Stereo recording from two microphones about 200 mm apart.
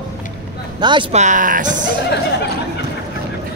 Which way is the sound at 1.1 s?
40° right (ahead or behind).